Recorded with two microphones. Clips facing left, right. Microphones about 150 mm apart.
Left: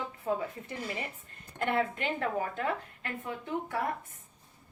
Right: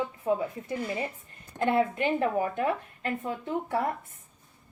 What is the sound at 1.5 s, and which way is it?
A woman's voice, 25° right (ahead or behind).